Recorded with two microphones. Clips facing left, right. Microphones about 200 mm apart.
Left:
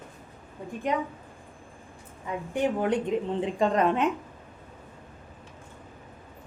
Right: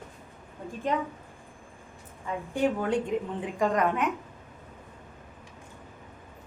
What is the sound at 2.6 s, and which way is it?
A woman's voice, 20° left (ahead or behind).